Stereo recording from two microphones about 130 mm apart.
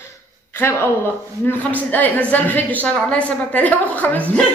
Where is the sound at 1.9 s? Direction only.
15° left (ahead or behind).